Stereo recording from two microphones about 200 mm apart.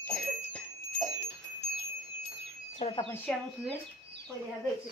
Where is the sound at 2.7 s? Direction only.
35° left (ahead or behind).